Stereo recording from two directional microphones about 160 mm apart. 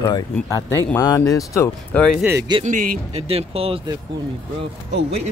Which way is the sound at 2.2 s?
15° right (ahead or behind).